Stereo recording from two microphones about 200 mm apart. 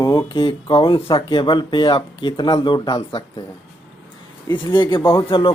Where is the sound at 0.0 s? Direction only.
20° left (ahead or behind).